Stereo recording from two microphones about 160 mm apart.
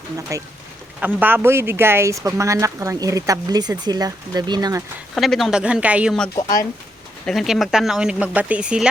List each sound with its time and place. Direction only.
0.2 s speech: 20° right (ahead or behind)
5.1 s speech: centre (ahead or behind)
7.3 s speech: centre (ahead or behind)